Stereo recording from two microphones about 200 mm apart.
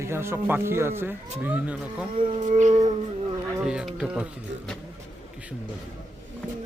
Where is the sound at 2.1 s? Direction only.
25° right (ahead or behind).